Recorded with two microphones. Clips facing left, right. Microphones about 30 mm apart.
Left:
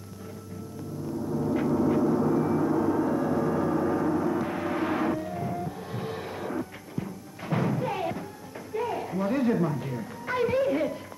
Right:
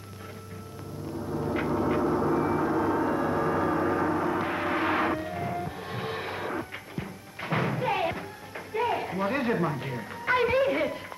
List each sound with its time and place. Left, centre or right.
1.2 s gong: centre
1.5 s gong: right
8.7 s music: right